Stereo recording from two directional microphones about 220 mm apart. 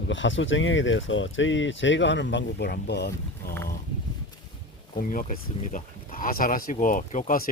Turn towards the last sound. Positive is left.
turn(degrees=40)  # may be behind; listen again after turning